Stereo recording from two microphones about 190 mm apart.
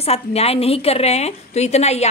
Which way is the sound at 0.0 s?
35° left (ahead or behind).